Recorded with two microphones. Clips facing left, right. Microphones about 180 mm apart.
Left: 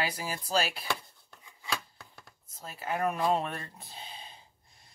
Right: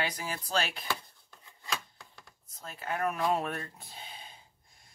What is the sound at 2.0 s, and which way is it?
Computer keyboard, 5° left (ahead or behind).